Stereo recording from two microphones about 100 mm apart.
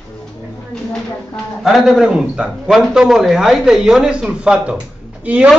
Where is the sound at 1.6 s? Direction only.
5° right (ahead or behind).